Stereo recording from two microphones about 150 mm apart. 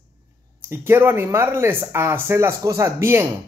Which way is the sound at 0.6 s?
15° right (ahead or behind).